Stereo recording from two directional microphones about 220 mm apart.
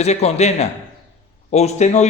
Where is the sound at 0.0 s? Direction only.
30° left (ahead or behind).